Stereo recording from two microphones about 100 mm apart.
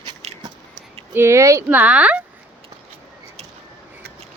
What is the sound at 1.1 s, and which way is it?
Speech, 25° right (ahead or behind).